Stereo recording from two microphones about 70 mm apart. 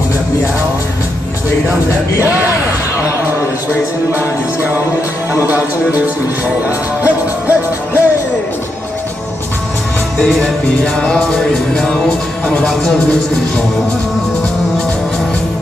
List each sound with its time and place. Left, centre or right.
5.5 s music: right
10.1 s music: centre